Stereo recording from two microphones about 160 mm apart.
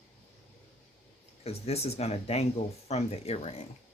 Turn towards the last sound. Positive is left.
turn(degrees=40)  # may be behind; listen again after turning